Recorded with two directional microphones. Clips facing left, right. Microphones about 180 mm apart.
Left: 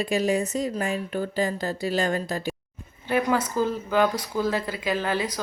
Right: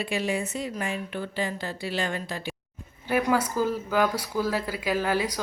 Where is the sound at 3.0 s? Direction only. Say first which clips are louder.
Left 1 dB; 10° right (ahead or behind).